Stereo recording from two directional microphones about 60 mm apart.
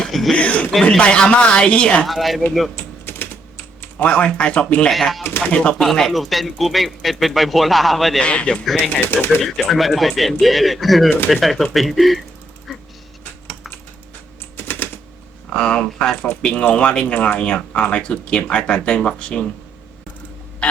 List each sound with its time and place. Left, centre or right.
0.1 s speech: centre
0.3 s speech: left
2.0 s speech: centre
2.7 s typing: left
3.9 s speech: left
4.9 s speech: centre
5.5 s speech: centre
5.8 s speech: centre
8.2 s speech: centre
9.0 s speech: left
9.4 s speech: centre
14.5 s typewriter: left
15.5 s speech: centre